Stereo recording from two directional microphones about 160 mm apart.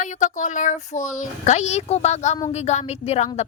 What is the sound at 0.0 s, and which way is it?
A woman's voice, 50° left (ahead or behind).